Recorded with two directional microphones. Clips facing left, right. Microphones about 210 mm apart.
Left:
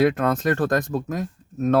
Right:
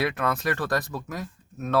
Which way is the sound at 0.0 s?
45° left (ahead or behind).